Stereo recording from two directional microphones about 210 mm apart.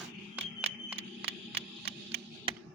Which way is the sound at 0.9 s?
30° right (ahead or behind).